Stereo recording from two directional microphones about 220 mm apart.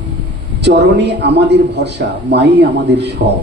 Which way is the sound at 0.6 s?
50° right (ahead or behind).